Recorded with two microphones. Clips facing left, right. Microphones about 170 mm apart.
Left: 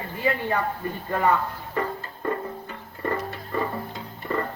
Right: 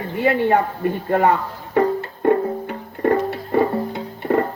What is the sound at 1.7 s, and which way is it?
Music, 65° right (ahead or behind).